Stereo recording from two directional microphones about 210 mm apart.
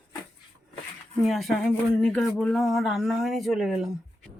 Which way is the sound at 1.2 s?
Centre (ahead or behind).